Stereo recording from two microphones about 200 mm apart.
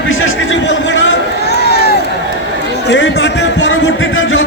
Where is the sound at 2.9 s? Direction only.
65° left (ahead or behind).